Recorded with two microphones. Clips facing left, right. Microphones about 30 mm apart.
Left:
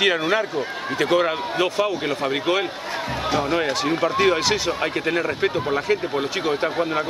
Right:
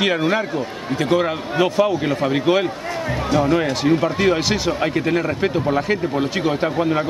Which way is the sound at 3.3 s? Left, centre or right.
Centre.